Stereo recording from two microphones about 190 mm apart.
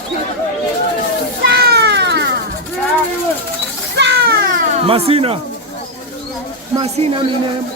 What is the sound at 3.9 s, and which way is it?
Children playing, 65° right (ahead or behind).